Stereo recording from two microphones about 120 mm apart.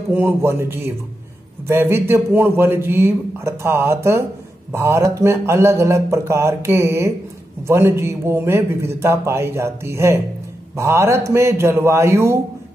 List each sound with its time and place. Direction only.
0.1 s a man's voice: 15° right (ahead or behind)